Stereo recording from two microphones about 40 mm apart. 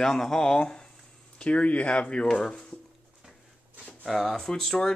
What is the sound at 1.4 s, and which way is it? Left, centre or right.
Speech, left.